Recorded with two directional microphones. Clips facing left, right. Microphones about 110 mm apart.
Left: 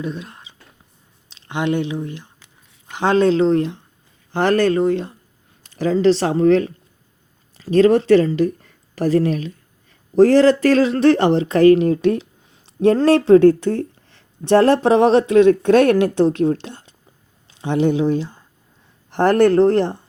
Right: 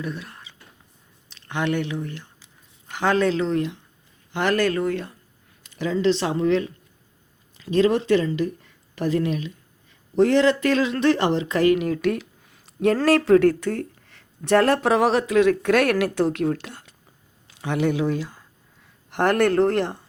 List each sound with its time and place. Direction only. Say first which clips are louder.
0.0 s speech: left 4 dB; 20° left (ahead or behind)
5.6 s speech: left 6 dB; 35° left (ahead or behind)